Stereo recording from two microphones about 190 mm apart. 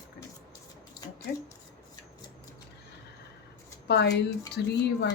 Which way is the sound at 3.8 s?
60° left (ahead or behind).